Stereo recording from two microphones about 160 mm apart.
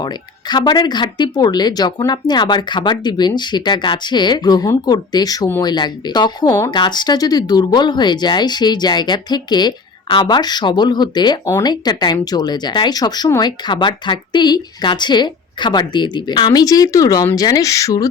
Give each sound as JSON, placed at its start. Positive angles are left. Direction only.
{"t": 0.0, "sound": "speech", "side_deg": 25}